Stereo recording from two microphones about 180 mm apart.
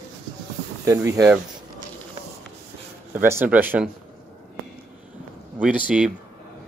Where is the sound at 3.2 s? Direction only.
10° right (ahead or behind).